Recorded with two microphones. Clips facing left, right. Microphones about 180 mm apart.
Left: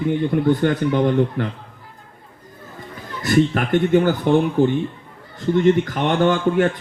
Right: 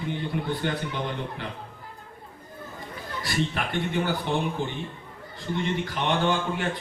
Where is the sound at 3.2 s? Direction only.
50° left (ahead or behind).